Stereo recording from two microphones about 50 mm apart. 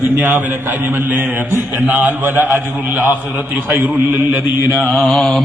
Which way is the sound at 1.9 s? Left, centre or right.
Right.